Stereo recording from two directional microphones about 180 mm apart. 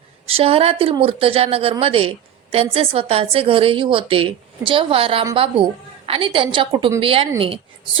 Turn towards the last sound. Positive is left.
turn(degrees=-30)  # may be behind; listen again after turning